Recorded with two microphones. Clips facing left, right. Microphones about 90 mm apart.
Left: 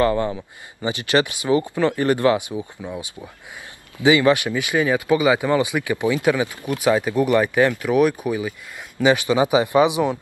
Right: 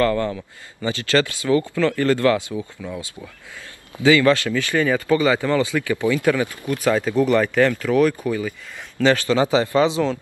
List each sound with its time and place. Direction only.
0.0 s speech: 20° left (ahead or behind)